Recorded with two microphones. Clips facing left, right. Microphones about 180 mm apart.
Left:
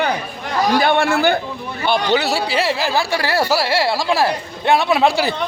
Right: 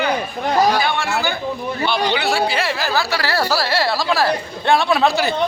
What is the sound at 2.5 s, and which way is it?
Speech, 30° left (ahead or behind).